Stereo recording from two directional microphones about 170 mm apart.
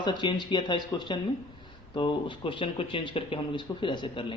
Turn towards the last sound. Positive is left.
turn(degrees=30)  # may be behind; listen again after turning